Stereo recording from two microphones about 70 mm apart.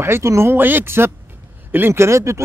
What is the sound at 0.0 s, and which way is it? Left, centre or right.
Speech, right.